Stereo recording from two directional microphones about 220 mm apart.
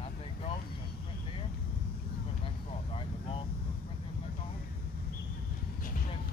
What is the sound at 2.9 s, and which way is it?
Vehicle, 25° left (ahead or behind).